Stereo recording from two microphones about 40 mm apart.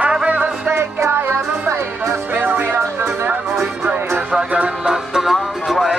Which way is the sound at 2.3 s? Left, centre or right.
Right.